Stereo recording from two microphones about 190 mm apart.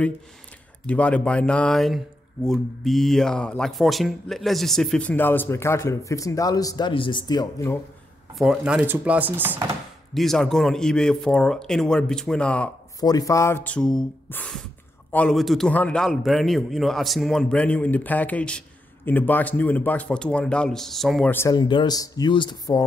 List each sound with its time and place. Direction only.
0.8 s speech: 5° left (ahead or behind)
8.4 s chopping: 5° right (ahead or behind)
10.1 s speech: centre (ahead or behind)
13.0 s speech: 20° left (ahead or behind)
13.7 s speech: 5° left (ahead or behind); by 22.8 s 20° left (ahead or behind)